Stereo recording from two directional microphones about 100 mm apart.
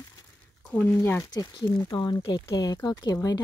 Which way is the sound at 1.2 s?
40° left (ahead or behind).